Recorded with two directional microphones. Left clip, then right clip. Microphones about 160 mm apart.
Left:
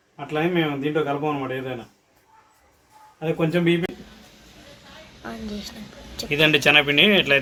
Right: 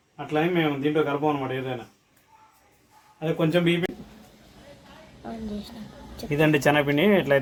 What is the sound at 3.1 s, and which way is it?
Speech, 20° right (ahead or behind).